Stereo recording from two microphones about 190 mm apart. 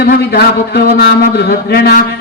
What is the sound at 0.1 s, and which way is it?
A man's voice, 55° left (ahead or behind).